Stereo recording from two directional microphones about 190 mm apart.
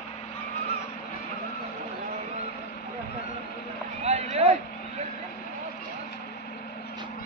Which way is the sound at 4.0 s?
35° right (ahead or behind).